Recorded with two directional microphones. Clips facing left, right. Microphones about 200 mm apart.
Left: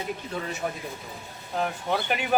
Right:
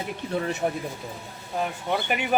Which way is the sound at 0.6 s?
30° right (ahead or behind).